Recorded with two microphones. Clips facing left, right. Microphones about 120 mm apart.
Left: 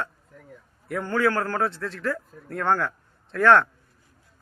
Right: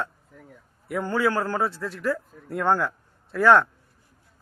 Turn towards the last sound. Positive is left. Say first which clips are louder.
# even
turn(degrees=-5)  # may be behind; listen again after turning